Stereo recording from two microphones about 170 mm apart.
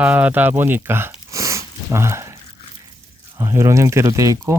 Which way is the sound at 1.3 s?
20° right (ahead or behind).